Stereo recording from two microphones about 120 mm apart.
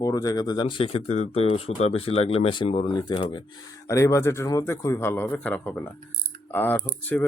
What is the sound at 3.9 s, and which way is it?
Speech, 25° left (ahead or behind).